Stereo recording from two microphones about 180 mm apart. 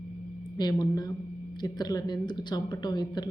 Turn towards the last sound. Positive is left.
turn(degrees=25)  # may be behind; listen again after turning